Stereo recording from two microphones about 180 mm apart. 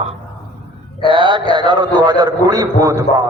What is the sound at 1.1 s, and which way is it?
A man's voice, 25° right (ahead or behind).